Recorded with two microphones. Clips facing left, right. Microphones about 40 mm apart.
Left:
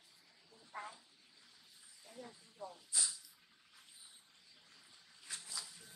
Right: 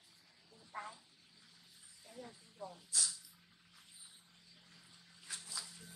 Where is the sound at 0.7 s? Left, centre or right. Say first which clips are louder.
Right 1 dB; centre.